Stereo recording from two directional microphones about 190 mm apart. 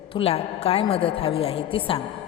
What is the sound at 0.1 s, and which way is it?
A woman's voice, 30° left (ahead or behind).